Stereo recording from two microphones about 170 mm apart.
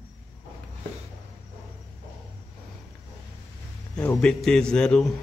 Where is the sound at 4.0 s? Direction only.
5° left (ahead or behind).